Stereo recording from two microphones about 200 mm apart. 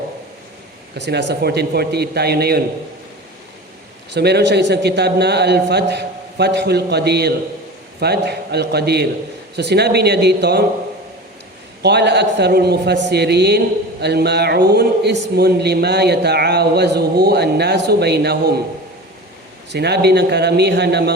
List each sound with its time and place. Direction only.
0.9 s a man's voice: 60° right (ahead or behind)
4.1 s a man's voice: 55° right (ahead or behind)
11.8 s a man's voice: 55° right (ahead or behind)
19.7 s a man's voice: 55° right (ahead or behind)